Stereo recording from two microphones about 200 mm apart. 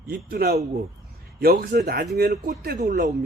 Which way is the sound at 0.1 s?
50° right (ahead or behind).